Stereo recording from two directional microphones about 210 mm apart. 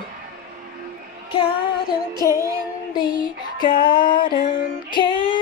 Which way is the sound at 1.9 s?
15° left (ahead or behind).